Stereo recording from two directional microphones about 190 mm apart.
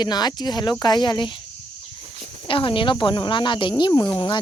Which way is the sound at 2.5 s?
25° left (ahead or behind).